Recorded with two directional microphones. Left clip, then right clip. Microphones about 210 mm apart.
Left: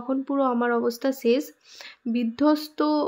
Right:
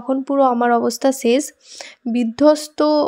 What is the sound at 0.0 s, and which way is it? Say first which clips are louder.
Speech: right 8 dB; 35° right (ahead or behind).